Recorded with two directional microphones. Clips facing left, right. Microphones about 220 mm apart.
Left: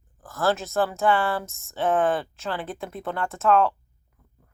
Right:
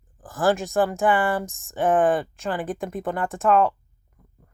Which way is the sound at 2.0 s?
Centre (ahead or behind).